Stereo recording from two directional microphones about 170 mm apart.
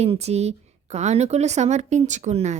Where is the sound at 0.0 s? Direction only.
40° right (ahead or behind).